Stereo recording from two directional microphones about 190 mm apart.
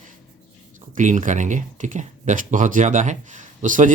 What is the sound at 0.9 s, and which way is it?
Speech, 40° right (ahead or behind).